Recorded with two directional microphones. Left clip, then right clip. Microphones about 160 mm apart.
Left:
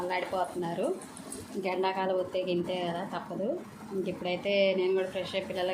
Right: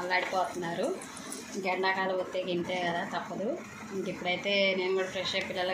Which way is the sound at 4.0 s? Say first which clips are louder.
Even; 40° left (ahead or behind).